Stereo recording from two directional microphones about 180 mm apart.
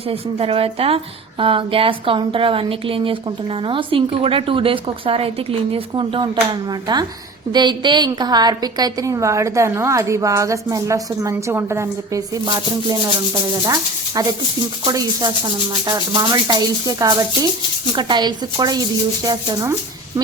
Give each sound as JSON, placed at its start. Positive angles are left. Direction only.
{"t": 0.1, "sound": "a woman's voice", "side_deg": -30}
{"t": 13.7, "sound": "a woman's voice", "side_deg": -20}